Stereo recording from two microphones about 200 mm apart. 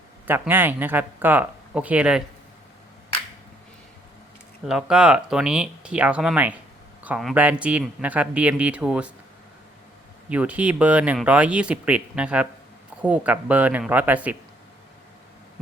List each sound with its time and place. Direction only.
0.3 s speech: 10° right (ahead or behind)
4.6 s speech: 5° right (ahead or behind)
10.2 s speech: 5° right (ahead or behind)